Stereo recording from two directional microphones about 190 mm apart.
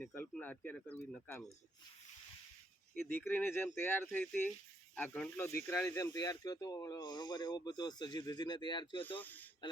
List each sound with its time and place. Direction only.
0.2 s speech: 10° left (ahead or behind)
2.9 s speech: 10° left (ahead or behind)
9.0 s speech: 10° left (ahead or behind)